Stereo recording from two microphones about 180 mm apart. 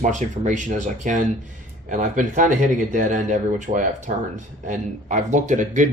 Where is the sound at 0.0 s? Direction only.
45° right (ahead or behind).